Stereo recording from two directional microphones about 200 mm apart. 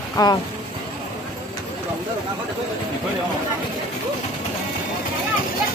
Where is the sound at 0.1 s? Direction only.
20° left (ahead or behind).